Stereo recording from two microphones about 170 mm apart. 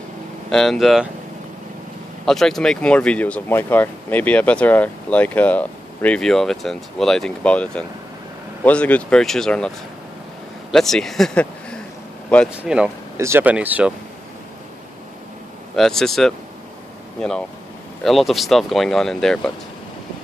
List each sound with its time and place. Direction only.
0.5 s speech: centre (ahead or behind)
2.2 s speech: centre (ahead or behind)
10.7 s speech: 5° left (ahead or behind)
15.7 s speech: centre (ahead or behind)